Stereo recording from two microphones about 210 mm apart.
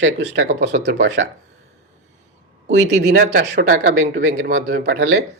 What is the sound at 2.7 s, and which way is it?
Speech, 55° right (ahead or behind).